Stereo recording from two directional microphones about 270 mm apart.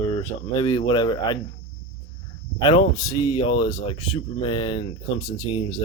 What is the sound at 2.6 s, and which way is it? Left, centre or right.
Speech, centre.